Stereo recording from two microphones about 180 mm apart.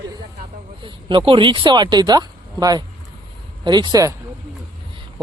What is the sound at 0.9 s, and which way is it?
Speech, 25° right (ahead or behind).